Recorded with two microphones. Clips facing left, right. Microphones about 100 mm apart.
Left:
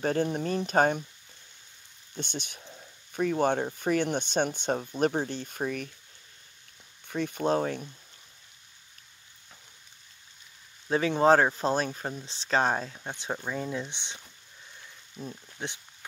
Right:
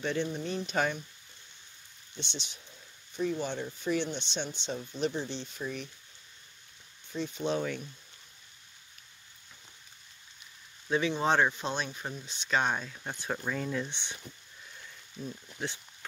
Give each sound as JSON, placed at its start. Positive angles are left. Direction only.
{"t": 0.0, "sound": "speech", "side_deg": 45}
{"t": 2.1, "sound": "speech", "side_deg": 50}
{"t": 7.1, "sound": "speech", "side_deg": 55}
{"t": 10.9, "sound": "speech", "side_deg": 45}
{"t": 12.9, "sound": "speech", "side_deg": 20}
{"t": 15.6, "sound": "a sound", "side_deg": 20}